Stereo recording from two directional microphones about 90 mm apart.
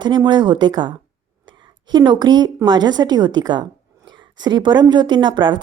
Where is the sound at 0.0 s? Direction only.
60° right (ahead or behind).